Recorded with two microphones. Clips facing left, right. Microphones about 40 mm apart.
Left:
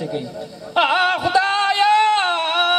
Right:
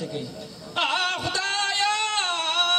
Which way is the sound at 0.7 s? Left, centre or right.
Centre.